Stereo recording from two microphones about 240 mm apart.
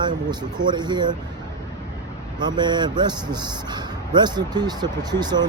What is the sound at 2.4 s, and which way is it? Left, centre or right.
Speech, centre.